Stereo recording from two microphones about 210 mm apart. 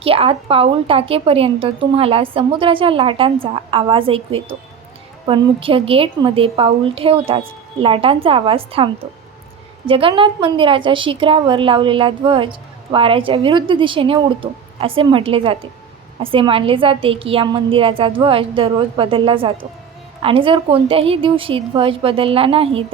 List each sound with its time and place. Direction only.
0.0 s a woman's voice: 25° right (ahead or behind)